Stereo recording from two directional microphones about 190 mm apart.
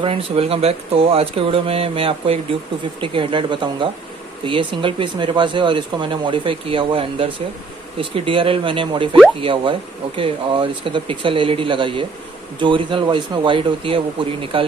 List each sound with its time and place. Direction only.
0.0 s speech: 30° right (ahead or behind)